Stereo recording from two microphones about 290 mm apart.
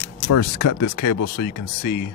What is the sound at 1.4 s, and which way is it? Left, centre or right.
Speech, left.